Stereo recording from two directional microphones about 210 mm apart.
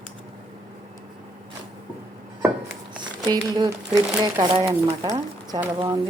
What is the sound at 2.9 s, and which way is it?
Speech, 20° right (ahead or behind).